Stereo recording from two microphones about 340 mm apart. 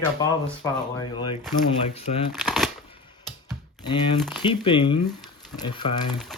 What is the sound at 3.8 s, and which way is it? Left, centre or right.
Speech, centre.